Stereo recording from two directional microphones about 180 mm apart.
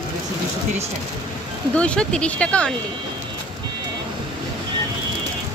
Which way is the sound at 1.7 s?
5° left (ahead or behind).